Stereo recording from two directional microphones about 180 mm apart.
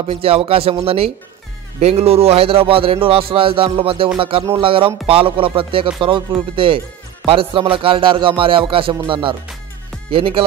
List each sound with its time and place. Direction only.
0.0 s a man's voice: 35° right (ahead or behind)
4.6 s music: 30° right (ahead or behind)
10.1 s a man's voice: 30° right (ahead or behind)